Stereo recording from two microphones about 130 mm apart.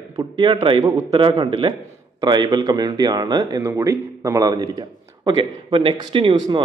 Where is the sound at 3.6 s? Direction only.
20° right (ahead or behind); by 6.6 s 35° right (ahead or behind).